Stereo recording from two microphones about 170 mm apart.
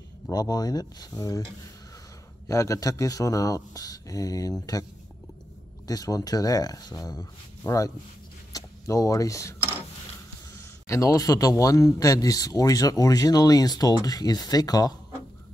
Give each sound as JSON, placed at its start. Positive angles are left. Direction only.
{"t": 0.3, "sound": "a man's voice", "side_deg": 20}
{"t": 2.4, "sound": "a man's voice", "side_deg": 20}
{"t": 5.9, "sound": "a man's voice", "side_deg": 20}
{"t": 10.9, "sound": "a man's voice", "side_deg": 20}